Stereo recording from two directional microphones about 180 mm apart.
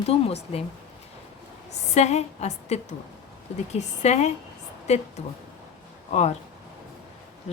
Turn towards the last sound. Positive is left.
turn(degrees=35)  # may be behind; listen again after turning